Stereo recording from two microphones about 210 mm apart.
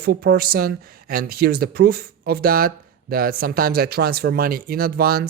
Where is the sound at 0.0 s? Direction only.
50° right (ahead or behind).